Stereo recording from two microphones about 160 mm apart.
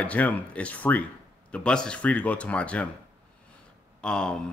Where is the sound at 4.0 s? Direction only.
5° left (ahead or behind).